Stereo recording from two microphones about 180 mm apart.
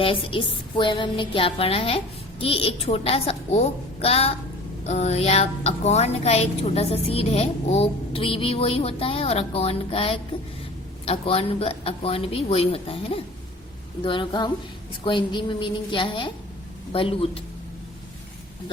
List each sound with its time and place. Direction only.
0.0 s music: 30° left (ahead or behind)
2.4 s a woman's voice: 30° left (ahead or behind)
14.0 s music: 30° left (ahead or behind)
16.9 s a woman's voice: 30° left (ahead or behind)